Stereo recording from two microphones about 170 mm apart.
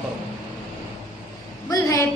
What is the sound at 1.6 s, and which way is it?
Speech, 20° left (ahead or behind).